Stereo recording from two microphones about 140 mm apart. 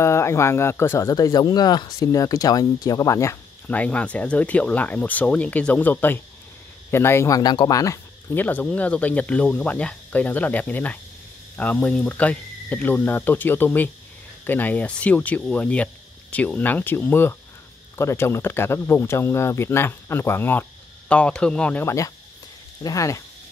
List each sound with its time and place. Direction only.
0.0 s speech: 20° left (ahead or behind)
21.8 s speech: 20° left (ahead or behind)